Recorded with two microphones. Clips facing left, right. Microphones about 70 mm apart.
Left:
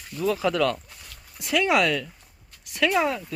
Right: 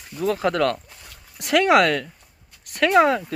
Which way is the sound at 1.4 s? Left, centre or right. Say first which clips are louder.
Right 5 dB; right.